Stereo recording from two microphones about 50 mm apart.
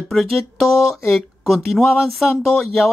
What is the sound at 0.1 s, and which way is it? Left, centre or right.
Speech, centre.